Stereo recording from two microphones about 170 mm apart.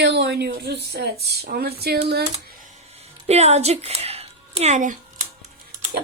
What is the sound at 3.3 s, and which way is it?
Speech, 40° right (ahead or behind).